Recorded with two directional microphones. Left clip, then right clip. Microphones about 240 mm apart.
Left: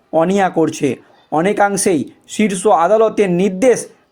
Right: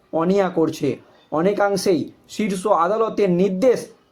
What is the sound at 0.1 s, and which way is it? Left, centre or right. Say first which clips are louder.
Speech: left 5 dB; left.